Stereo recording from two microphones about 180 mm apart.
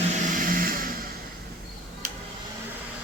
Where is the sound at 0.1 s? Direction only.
45° right (ahead or behind).